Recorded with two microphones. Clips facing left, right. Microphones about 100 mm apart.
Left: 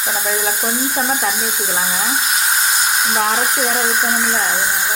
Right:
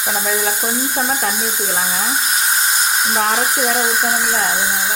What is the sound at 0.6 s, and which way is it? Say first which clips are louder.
Speech: even; 15° right (ahead or behind).